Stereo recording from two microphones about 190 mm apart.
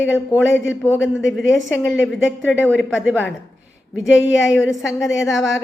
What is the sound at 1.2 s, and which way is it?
Speech, 85° left.